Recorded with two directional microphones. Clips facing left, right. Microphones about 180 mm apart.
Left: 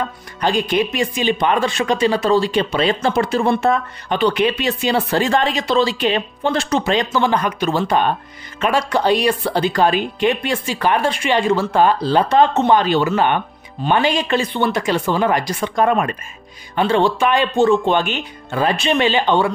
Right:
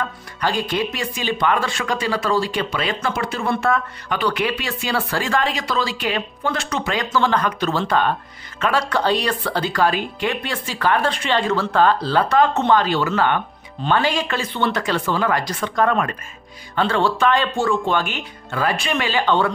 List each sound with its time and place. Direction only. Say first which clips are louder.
0.4 s speech: left 4 dB; 20° left (ahead or behind)
7.1 s speech: left 2 dB; 15° left (ahead or behind)